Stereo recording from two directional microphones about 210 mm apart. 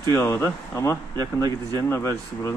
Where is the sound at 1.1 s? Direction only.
20° right (ahead or behind).